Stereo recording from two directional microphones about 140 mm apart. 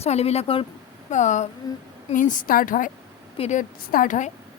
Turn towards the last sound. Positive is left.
turn(degrees=75)  # may be behind; listen again after turning